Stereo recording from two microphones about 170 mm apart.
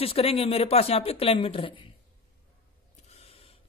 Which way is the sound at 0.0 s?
35° left (ahead or behind).